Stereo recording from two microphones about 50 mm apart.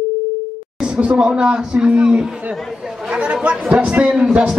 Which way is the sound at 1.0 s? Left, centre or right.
Centre.